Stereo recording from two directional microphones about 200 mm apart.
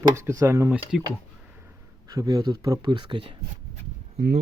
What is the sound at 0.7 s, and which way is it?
Speech, centre (ahead or behind).